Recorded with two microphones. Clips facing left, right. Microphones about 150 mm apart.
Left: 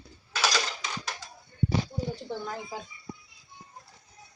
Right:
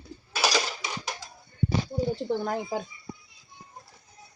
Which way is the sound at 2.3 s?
55° right (ahead or behind).